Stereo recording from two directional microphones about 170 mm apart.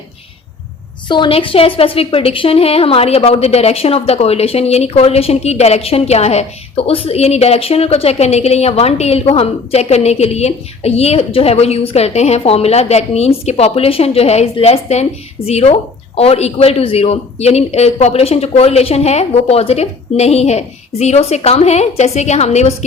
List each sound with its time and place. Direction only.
1.0 s a woman's voice: 25° left (ahead or behind)